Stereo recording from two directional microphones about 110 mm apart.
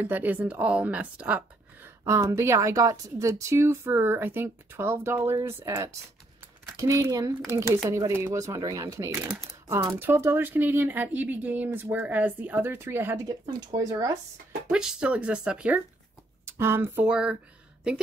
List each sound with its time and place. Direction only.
0.0 s speech: 15° right (ahead or behind)
2.0 s a woman's voice: 25° right (ahead or behind)
14.7 s speech: 5° right (ahead or behind)
16.4 s a woman's voice: 25° right (ahead or behind)